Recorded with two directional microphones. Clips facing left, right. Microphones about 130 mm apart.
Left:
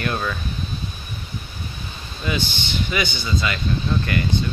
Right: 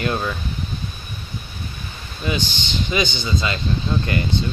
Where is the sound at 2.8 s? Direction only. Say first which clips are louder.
Right 5 dB; 20° right (ahead or behind).